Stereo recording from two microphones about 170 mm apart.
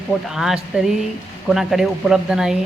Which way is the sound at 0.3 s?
Centre (ahead or behind).